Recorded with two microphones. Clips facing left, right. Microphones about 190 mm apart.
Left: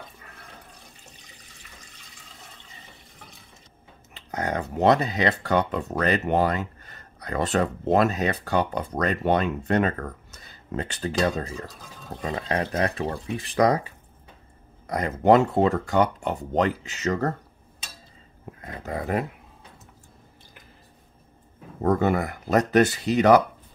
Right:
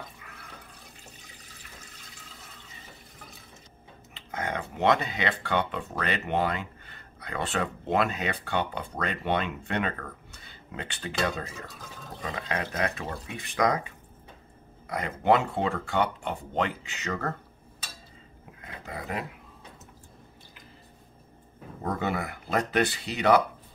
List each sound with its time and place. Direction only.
4.1 s speech: 40° left (ahead or behind)
18.4 s speech: 45° left (ahead or behind)
21.8 s speech: 45° left (ahead or behind)